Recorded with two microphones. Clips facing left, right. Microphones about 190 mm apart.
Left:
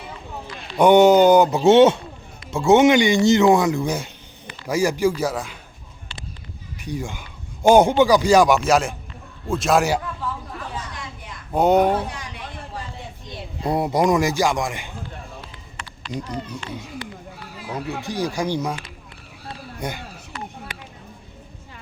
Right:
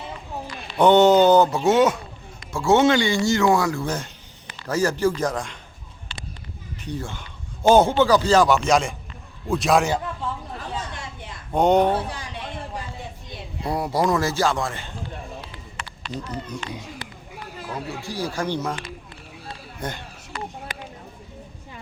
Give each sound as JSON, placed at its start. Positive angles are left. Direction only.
{"t": 0.8, "sound": "speech", "side_deg": 10}
{"t": 6.7, "sound": "a man's voice", "side_deg": 10}
{"t": 11.5, "sound": "speech", "side_deg": 5}
{"t": 13.7, "sound": "speech", "side_deg": 20}
{"t": 17.7, "sound": "speech", "side_deg": 20}
{"t": 19.8, "sound": "speech", "side_deg": 10}